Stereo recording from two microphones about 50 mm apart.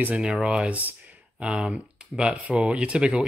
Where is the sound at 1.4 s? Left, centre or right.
Right.